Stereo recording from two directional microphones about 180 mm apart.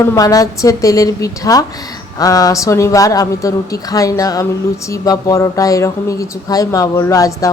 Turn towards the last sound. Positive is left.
turn(degrees=20)  # may be behind; listen again after turning